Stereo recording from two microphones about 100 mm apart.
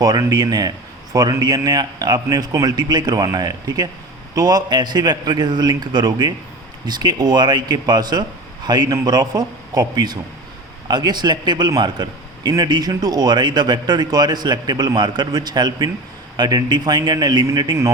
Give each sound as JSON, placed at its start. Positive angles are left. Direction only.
{"t": 0.0, "sound": "a man's voice", "side_deg": -40}